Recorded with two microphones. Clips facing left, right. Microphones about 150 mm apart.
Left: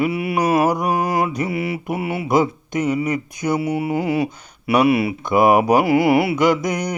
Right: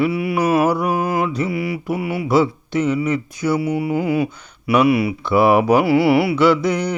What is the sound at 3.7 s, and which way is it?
Speech, 20° left (ahead or behind).